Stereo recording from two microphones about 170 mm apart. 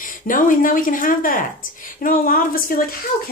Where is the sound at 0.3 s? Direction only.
50° left (ahead or behind).